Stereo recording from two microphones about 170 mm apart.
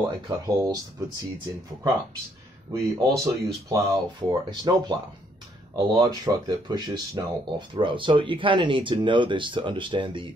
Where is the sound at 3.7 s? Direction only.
20° right (ahead or behind).